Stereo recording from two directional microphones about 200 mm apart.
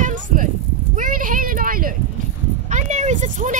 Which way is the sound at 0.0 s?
40° right (ahead or behind).